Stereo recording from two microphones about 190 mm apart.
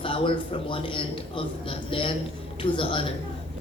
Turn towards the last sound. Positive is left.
turn(degrees=30)  # may be behind; listen again after turning